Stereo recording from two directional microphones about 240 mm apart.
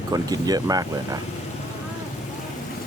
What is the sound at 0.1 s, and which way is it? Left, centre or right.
Speech, centre.